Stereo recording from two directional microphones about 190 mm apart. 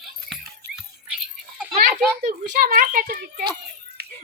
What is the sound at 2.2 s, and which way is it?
A child's voice, 45° right (ahead or behind).